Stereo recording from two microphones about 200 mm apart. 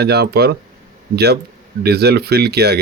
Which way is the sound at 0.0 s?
55° right (ahead or behind).